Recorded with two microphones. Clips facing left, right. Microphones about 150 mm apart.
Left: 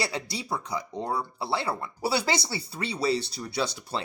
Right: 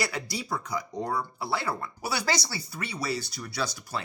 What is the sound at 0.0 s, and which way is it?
Speech, 30° left (ahead or behind).